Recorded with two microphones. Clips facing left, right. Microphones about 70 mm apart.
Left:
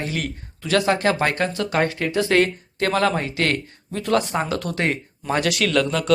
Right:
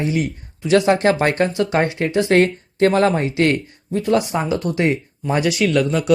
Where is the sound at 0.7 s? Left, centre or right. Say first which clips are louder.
Right 4 dB; right.